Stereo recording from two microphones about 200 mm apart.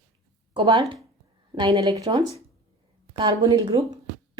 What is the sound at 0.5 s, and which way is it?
Speech, 30° right (ahead or behind).